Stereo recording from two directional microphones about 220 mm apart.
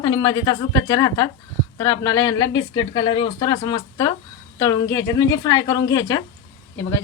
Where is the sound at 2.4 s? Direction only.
60° left (ahead or behind).